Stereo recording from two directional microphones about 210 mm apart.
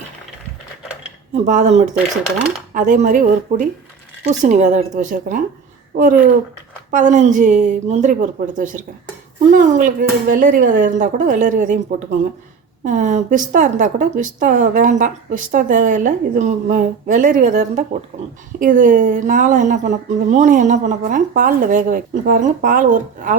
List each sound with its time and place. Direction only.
1.5 s speech: 35° right (ahead or behind)
6.9 s speech: 35° right (ahead or behind)